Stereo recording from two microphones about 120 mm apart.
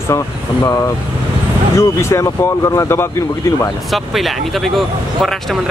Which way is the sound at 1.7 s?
25° left (ahead or behind).